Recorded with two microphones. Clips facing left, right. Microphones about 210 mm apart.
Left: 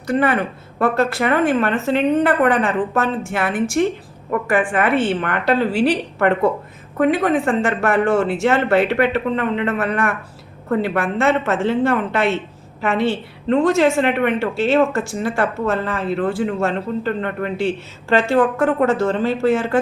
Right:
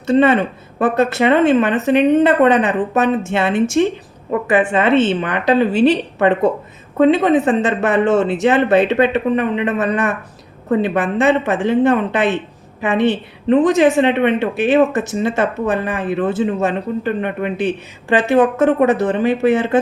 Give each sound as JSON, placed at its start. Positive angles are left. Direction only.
{"t": 0.1, "sound": "a woman's voice", "side_deg": -25}